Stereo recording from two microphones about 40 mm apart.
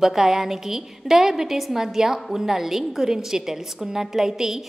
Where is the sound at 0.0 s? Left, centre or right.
Centre.